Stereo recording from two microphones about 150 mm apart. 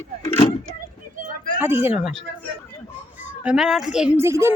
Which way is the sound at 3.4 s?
5° right (ahead or behind).